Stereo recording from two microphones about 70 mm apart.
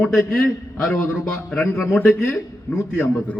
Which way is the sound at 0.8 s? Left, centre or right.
Centre.